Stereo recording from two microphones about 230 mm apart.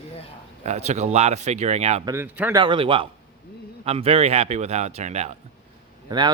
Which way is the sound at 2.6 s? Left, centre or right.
Right.